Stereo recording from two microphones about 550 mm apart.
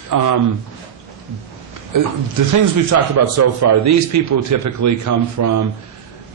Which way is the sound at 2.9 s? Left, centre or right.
Right.